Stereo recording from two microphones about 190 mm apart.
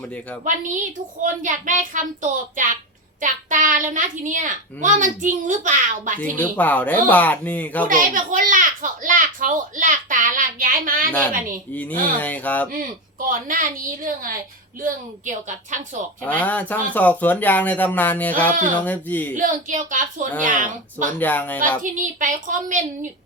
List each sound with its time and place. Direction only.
0.4 s a child's voice: 40° right (ahead or behind)
6.3 s speech: 10° left (ahead or behind)
7.9 s a child's voice: 45° right (ahead or behind)
11.7 s speech: 10° left (ahead or behind)
12.7 s a child's voice: 45° right (ahead or behind)
16.2 s speech: 10° left (ahead or behind)
19.3 s a child's voice: 45° right (ahead or behind)
21.2 s speech: 10° left (ahead or behind)
21.8 s a child's voice: 45° right (ahead or behind)